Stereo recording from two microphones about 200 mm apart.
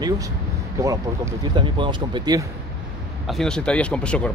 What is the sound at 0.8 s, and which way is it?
Speech, 20° right (ahead or behind).